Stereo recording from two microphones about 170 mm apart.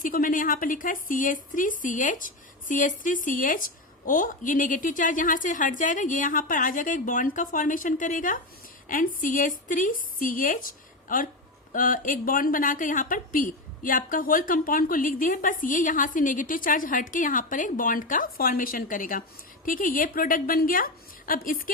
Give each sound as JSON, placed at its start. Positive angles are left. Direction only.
{"t": 0.0, "sound": "a woman's voice", "side_deg": 55}